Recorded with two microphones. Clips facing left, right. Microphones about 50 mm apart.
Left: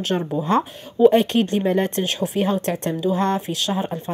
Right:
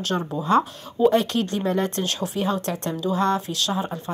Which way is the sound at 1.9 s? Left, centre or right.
Left.